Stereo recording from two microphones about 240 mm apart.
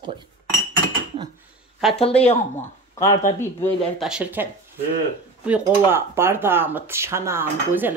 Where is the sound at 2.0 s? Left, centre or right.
Left.